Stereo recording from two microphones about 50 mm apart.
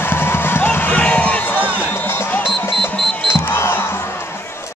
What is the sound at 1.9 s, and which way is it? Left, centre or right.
Music, left.